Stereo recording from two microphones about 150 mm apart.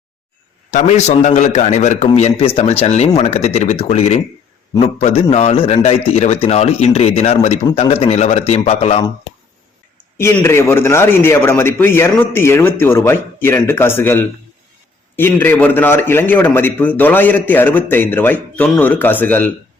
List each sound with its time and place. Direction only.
0.7 s a man's voice: 50° left (ahead or behind)
10.2 s a man's voice: 15° left (ahead or behind)